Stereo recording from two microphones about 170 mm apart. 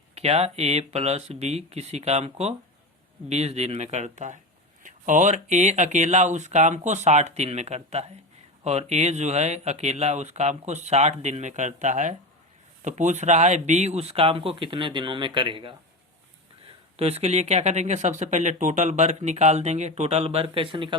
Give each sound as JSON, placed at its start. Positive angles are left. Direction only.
{"t": 0.1, "sound": "speech", "side_deg": -40}
{"t": 17.0, "sound": "speech", "side_deg": -40}